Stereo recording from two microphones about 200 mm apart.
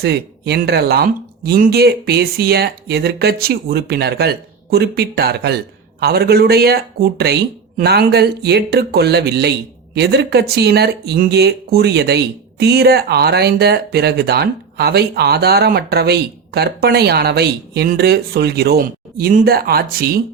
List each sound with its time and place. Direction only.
0.0 s speech: 55° right (ahead or behind)